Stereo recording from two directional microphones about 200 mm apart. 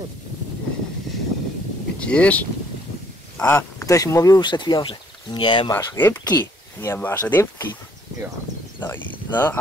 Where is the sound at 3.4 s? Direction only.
15° left (ahead or behind).